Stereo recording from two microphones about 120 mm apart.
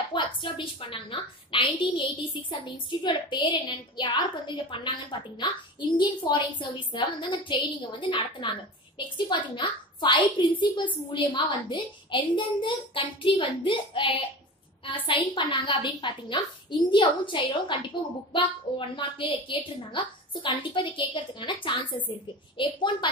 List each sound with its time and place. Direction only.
0.1 s a woman's voice: 45° left (ahead or behind)